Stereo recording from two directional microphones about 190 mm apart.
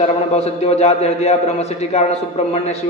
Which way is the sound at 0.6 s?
35° left (ahead or behind).